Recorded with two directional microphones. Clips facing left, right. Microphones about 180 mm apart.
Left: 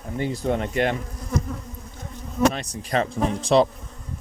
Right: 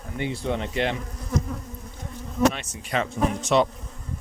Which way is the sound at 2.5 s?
35° left (ahead or behind).